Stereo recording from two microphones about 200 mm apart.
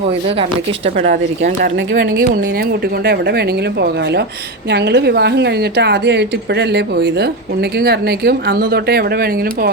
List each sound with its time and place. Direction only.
0.9 s a woman's voice: 35° right (ahead or behind)